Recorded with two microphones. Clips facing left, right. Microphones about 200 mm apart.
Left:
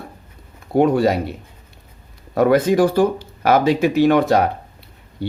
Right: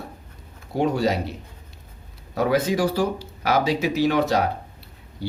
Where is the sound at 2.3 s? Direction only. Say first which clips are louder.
Left 7 dB; 55° left (ahead or behind).